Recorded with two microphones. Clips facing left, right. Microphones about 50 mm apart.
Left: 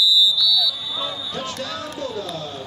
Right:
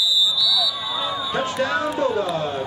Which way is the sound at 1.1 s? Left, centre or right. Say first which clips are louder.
Right 6 dB; right.